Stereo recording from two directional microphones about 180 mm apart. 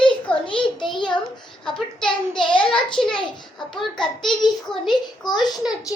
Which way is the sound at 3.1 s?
25° left (ahead or behind).